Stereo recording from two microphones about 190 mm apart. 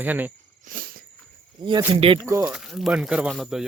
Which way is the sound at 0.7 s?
50° right (ahead or behind).